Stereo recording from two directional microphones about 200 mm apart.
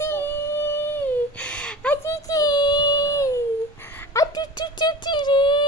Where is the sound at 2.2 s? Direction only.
20° left (ahead or behind).